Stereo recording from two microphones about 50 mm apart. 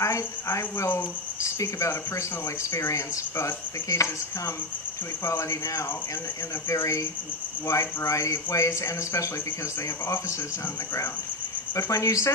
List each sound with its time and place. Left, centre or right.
0.0 s cricket: left
5.2 s speech: left
11.7 s speech: left